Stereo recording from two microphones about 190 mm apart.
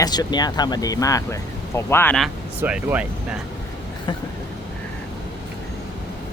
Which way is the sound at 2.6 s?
10° right (ahead or behind).